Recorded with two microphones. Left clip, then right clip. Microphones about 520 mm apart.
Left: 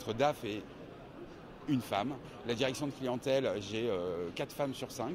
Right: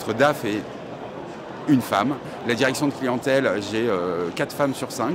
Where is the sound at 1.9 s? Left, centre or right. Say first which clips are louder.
Right 13 dB; left.